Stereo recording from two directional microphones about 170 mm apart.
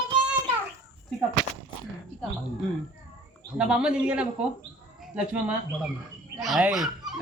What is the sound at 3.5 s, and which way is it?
Speech, 5° right (ahead or behind).